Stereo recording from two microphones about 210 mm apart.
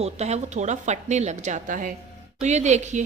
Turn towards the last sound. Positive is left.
turn(degrees=-35)  # may be behind; listen again after turning